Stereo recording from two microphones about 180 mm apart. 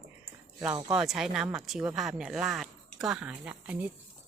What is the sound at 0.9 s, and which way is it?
Speech, centre (ahead or behind).